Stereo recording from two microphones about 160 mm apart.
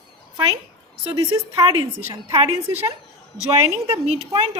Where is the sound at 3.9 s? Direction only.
40° right (ahead or behind).